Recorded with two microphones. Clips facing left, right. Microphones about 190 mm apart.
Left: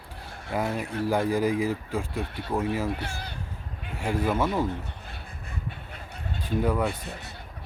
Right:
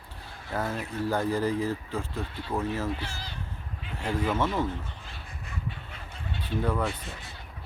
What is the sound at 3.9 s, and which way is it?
Speech, 10° left (ahead or behind).